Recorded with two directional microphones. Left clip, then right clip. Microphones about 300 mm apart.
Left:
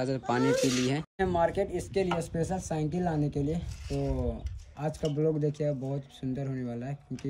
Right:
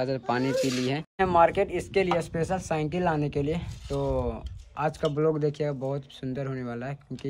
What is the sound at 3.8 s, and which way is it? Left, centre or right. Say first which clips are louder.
Speech: right 5 dB; centre.